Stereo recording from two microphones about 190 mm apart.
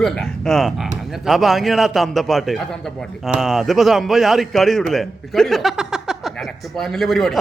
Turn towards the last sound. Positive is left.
turn(degrees=0)  # may be behind; listen again after turning